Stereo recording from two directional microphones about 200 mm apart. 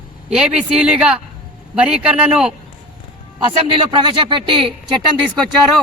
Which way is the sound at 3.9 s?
25° right (ahead or behind).